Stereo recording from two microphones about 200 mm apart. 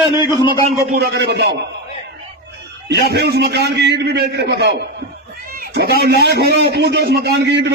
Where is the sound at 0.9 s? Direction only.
55° right (ahead or behind).